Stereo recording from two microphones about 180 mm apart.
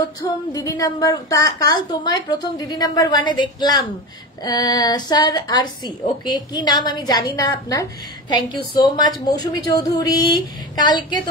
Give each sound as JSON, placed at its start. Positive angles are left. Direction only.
{"t": 0.5, "sound": "a woman's voice", "side_deg": 20}
{"t": 8.8, "sound": "a woman's voice", "side_deg": 25}